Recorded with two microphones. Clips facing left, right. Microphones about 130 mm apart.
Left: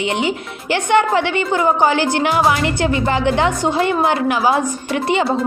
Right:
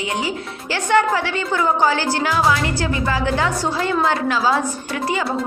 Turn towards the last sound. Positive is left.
turn(degrees=25)  # may be behind; listen again after turning